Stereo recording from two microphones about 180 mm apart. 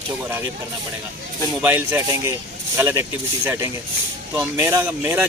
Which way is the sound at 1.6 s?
15° right (ahead or behind).